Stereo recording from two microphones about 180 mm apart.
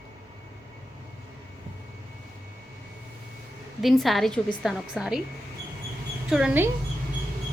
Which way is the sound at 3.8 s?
Centre (ahead or behind).